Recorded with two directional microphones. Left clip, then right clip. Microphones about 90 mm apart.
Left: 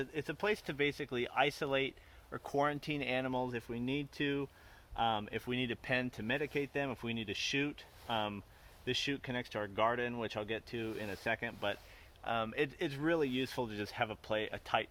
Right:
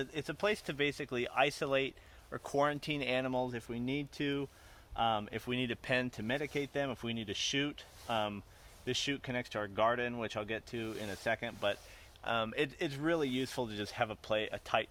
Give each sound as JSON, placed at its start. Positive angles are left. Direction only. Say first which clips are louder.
{"t": 0.0, "sound": "speech", "louder": "right 2 dB", "side_deg": -45}
{"t": 12.2, "sound": "speech", "louder": "right 1 dB", "side_deg": -45}